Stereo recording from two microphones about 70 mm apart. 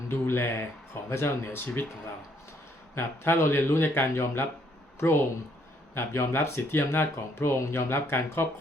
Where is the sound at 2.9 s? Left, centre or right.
Left.